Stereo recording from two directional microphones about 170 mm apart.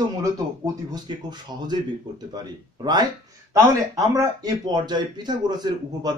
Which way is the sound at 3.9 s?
20° right (ahead or behind).